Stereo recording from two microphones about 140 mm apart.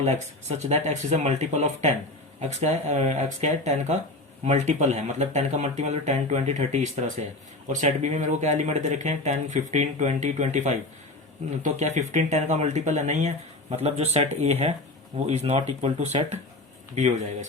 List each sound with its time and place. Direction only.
0.0 s speech: 55° right (ahead or behind)